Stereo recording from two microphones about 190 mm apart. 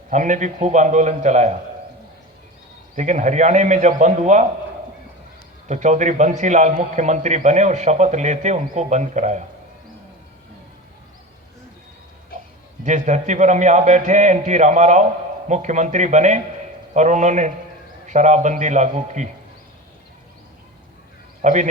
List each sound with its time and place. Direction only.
0.1 s a man's voice: 40° right (ahead or behind)
2.9 s a man's voice: 40° right (ahead or behind)
5.6 s a man's voice: 40° right (ahead or behind)
12.8 s a man's voice: 40° right (ahead or behind)
21.4 s a man's voice: 40° right (ahead or behind)